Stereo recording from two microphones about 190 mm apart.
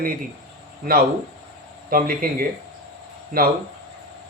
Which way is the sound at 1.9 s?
50° right (ahead or behind).